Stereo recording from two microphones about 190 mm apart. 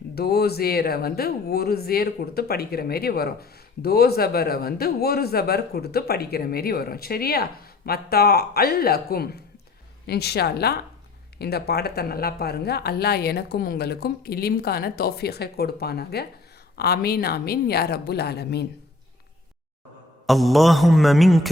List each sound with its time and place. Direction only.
0.2 s speech: 55° left (ahead or behind)
20.2 s mantra: centre (ahead or behind)